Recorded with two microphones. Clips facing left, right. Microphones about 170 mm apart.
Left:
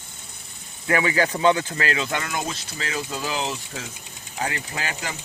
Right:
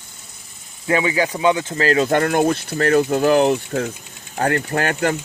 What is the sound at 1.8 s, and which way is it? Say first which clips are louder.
Speech: right 10 dB; 40° right (ahead or behind).